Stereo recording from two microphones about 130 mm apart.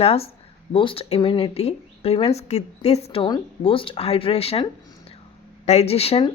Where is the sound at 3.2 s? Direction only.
40° left (ahead or behind).